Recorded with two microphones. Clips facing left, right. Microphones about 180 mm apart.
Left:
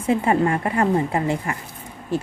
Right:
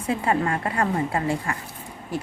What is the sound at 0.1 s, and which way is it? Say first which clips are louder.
Speech: left 5 dB; 25° left (ahead or behind).